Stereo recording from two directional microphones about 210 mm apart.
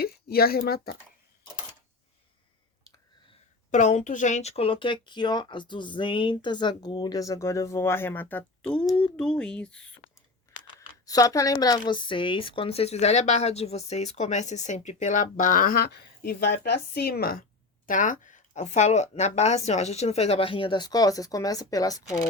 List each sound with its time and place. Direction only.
0.0 s speech: 45° left (ahead or behind)
3.2 s a woman's voice: 35° left (ahead or behind); by 10.2 s 5° left (ahead or behind)
10.8 s speech: 15° left (ahead or behind)